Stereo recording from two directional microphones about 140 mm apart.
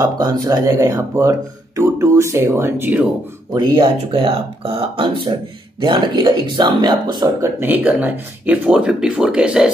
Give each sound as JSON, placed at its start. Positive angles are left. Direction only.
{"t": 0.0, "sound": "speech", "side_deg": -30}
{"t": 3.5, "sound": "speech", "side_deg": -30}
{"t": 7.4, "sound": "speech", "side_deg": -10}